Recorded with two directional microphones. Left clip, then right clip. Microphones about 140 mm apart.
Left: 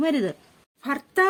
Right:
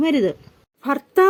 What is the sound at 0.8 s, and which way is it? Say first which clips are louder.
Speech: right 5 dB; 15° right (ahead or behind).